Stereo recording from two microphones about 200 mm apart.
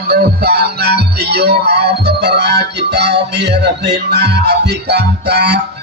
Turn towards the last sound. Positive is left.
turn(degrees=-55)  # may be behind; listen again after turning